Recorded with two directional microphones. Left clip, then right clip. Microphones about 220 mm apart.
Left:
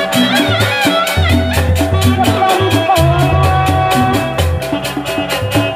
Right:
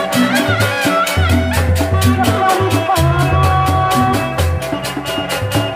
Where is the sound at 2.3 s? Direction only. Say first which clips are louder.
Left 2 dB; 20° right (ahead or behind).